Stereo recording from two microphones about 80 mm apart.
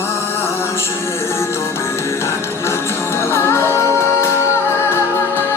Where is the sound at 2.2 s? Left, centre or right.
Left.